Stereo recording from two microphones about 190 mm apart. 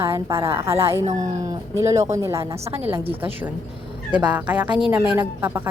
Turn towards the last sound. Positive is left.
turn(degrees=-10)  # may be behind; listen again after turning